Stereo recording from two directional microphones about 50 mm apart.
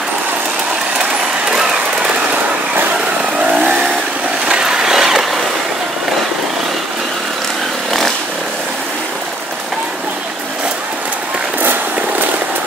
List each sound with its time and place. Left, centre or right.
1.5 s jackhammer: centre
3.3 s vehicle: right
4.5 s vehicle: centre